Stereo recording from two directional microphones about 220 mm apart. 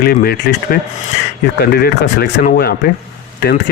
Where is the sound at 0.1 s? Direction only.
45° left (ahead or behind).